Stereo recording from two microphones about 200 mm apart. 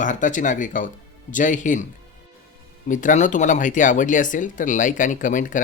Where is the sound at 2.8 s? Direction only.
40° left (ahead or behind).